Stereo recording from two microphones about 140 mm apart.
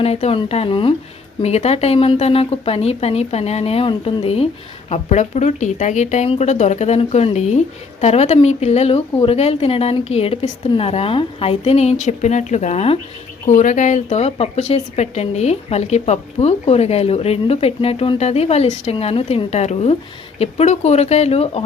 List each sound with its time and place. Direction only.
0.0 s speech: 45° left (ahead or behind)
1.4 s speech: 50° left (ahead or behind)
13.5 s speech: 65° left (ahead or behind); by 21.6 s 45° left (ahead or behind)